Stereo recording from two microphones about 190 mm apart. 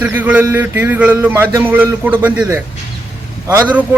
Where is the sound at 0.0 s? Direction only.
10° right (ahead or behind).